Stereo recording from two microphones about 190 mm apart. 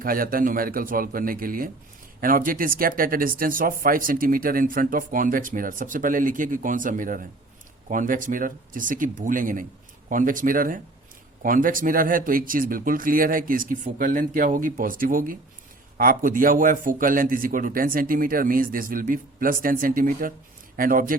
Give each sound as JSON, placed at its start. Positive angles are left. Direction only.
{"t": 0.0, "sound": "speech", "side_deg": -50}